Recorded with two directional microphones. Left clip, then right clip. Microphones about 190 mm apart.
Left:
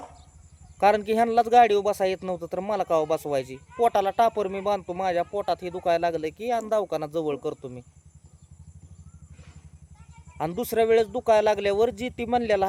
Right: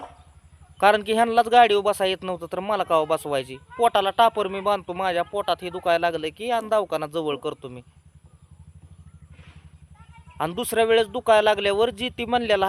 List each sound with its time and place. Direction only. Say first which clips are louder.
0.8 s a man's voice: right 2 dB; centre (ahead or behind)
10.3 s a man's voice: right 2 dB; 5° left (ahead or behind)